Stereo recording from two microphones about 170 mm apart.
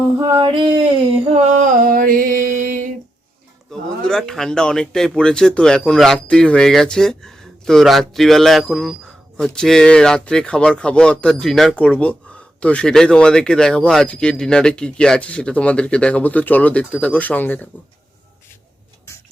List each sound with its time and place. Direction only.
0.2 s a sound: 20° right (ahead or behind)
1.6 s music: 50° right (ahead or behind)
3.7 s speech: 5° left (ahead or behind)